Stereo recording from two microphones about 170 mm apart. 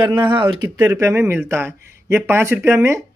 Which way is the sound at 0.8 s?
15° right (ahead or behind).